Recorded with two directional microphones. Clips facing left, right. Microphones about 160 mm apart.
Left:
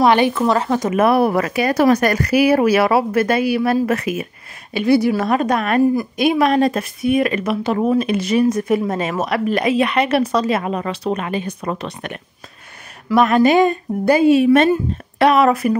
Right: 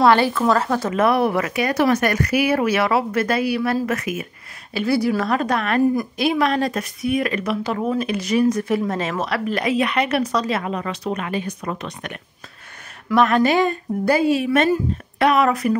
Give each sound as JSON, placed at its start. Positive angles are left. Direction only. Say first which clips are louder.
{"t": 0.0, "sound": "speech", "louder": "left 2 dB", "side_deg": 20}
{"t": 13.1, "sound": "speech", "louder": "left 3 dB", "side_deg": 15}